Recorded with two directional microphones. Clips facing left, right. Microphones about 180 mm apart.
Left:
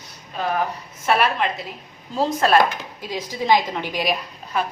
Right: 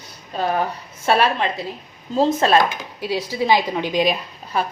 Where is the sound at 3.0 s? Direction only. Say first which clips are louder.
Right 6 dB; 10° right (ahead or behind); by 4.7 s 30° right (ahead or behind).